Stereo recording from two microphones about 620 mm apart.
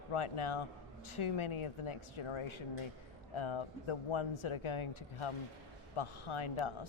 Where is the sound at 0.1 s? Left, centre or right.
Left.